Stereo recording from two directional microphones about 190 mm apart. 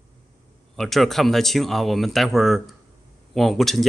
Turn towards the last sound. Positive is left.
turn(degrees=0)  # may be behind; listen again after turning